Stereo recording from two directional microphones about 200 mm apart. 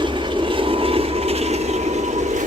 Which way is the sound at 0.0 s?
25° right (ahead or behind).